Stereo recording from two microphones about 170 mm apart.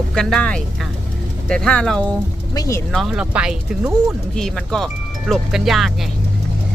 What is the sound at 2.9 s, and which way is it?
Speech, centre (ahead or behind).